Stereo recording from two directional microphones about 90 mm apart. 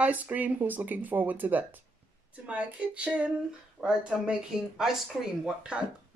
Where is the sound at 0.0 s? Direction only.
15° right (ahead or behind).